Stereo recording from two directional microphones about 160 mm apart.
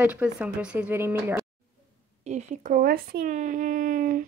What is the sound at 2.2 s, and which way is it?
Speech, 50° right (ahead or behind).